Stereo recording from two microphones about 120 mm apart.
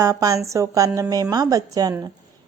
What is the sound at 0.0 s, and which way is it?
A woman's voice, 30° right (ahead or behind).